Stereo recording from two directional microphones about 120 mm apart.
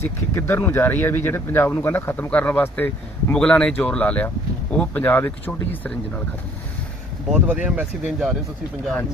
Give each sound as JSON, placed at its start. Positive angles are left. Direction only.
{"t": 0.0, "sound": "speech", "side_deg": 20}
{"t": 7.3, "sound": "speech", "side_deg": -10}